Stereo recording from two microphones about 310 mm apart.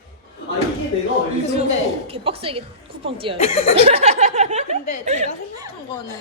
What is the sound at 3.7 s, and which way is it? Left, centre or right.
A woman's voice, centre.